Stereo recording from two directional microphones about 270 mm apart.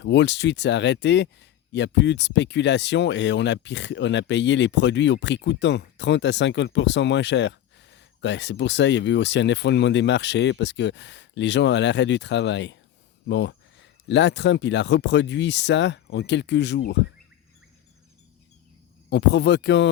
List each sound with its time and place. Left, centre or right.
0.0 s speech: left
19.1 s speech: left